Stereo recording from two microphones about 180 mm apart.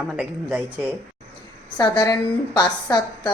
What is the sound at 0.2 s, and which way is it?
Speech, 10° right (ahead or behind).